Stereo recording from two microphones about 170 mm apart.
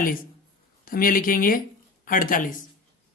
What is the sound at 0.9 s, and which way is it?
Speech, 55° left (ahead or behind).